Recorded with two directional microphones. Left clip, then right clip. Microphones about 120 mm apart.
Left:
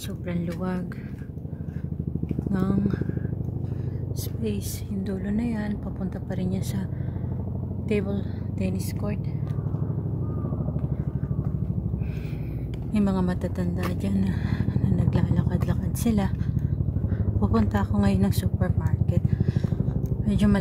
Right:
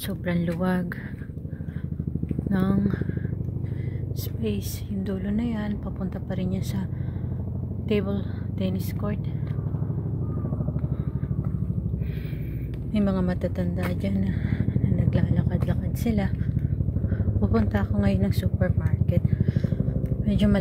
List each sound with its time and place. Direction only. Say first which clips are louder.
0.3 s speech: right 5 dB; 30° right (ahead or behind)
2.5 s speech: right 2 dB; 15° right (ahead or behind)
5.0 s a woman's voice: even; 5° right (ahead or behind)
7.9 s a woman's voice: right 1 dB; 5° right (ahead or behind)
12.9 s a woman's voice: even; 5° left (ahead or behind)
14.2 s speech: even; 15° left (ahead or behind)
17.4 s a woman's voice: even; 10° left (ahead or behind)